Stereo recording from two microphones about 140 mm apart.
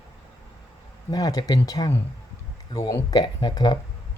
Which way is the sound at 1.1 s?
30° left (ahead or behind).